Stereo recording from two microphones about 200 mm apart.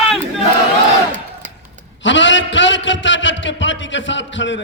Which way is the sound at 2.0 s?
65° left (ahead or behind).